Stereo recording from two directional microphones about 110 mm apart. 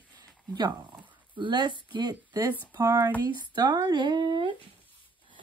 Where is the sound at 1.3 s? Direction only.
45° right (ahead or behind).